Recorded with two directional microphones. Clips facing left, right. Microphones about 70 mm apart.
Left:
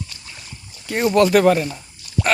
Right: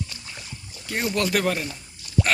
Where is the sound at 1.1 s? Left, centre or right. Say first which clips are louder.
Left 11 dB; left.